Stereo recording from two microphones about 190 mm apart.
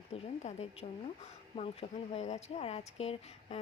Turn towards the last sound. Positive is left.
turn(degrees=30)  # may be behind; listen again after turning